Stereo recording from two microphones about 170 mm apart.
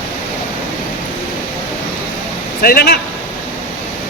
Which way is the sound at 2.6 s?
65° left (ahead or behind).